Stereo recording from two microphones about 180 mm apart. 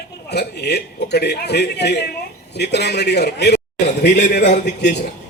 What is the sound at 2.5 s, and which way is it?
A man's voice, 70° left (ahead or behind).